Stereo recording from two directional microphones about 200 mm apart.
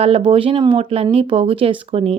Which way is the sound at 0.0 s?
30° right (ahead or behind).